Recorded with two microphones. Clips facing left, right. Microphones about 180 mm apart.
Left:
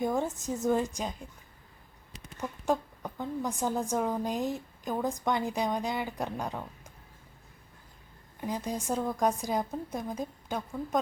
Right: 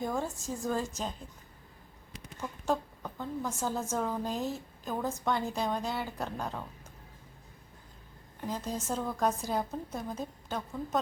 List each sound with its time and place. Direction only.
0.0 s a woman's voice: 20° left (ahead or behind)
2.4 s a woman's voice: 15° left (ahead or behind)
8.4 s a woman's voice: 15° left (ahead or behind)